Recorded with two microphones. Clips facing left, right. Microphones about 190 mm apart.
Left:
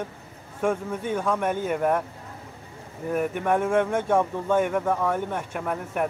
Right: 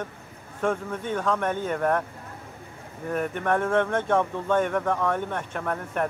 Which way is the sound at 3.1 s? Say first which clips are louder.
Left 2 dB; 10° left (ahead or behind).